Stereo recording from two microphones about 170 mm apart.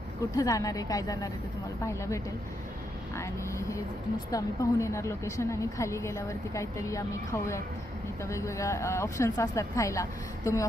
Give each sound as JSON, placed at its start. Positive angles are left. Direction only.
{"t": 0.3, "sound": "a woman's voice", "side_deg": 20}